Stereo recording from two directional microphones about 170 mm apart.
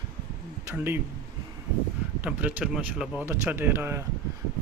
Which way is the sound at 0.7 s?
15° right (ahead or behind).